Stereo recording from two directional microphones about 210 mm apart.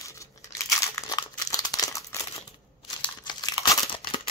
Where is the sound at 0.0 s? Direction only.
15° left (ahead or behind).